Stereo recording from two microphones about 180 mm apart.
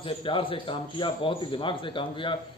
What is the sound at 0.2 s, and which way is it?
A man's voice, 30° left (ahead or behind).